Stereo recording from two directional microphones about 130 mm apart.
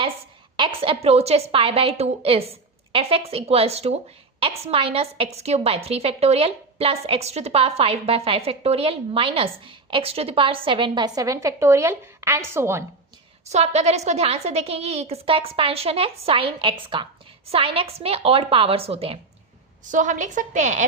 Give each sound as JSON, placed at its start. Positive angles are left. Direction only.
{"t": 0.5, "sound": "a woman's voice", "side_deg": -45}
{"t": 13.4, "sound": "a woman's voice", "side_deg": -60}
{"t": 19.8, "sound": "a woman's voice", "side_deg": -75}